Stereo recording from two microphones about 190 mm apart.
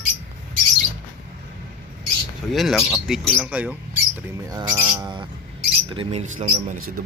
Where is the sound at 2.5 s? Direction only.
Centre (ahead or behind).